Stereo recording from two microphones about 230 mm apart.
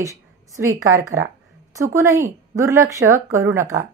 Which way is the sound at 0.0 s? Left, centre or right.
Centre.